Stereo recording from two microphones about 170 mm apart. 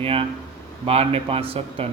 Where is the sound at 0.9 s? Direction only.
35° right (ahead or behind).